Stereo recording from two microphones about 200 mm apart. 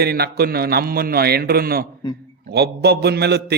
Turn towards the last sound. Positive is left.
turn(degrees=-55)  # may be behind; listen again after turning